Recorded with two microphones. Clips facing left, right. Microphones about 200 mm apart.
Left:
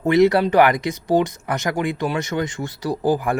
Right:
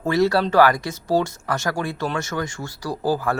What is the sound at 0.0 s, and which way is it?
Speech, 20° left (ahead or behind).